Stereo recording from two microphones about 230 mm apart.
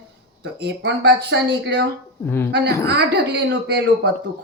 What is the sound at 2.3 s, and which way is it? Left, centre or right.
Speech, centre.